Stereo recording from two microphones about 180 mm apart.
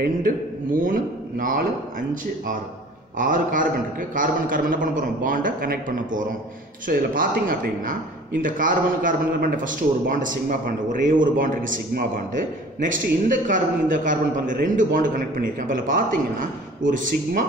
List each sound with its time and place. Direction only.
0.0 s a man's voice: 50° right (ahead or behind)